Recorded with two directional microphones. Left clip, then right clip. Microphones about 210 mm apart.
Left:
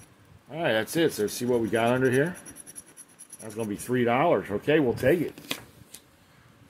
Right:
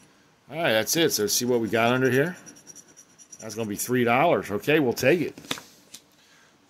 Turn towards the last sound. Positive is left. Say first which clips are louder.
# right 2 dB
turn(degrees=-25)  # may be behind; listen again after turning